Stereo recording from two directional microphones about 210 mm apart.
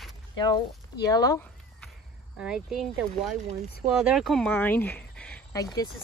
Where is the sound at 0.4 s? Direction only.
20° left (ahead or behind).